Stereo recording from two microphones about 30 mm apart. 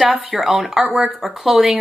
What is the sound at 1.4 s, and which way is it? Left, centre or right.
Speech, centre.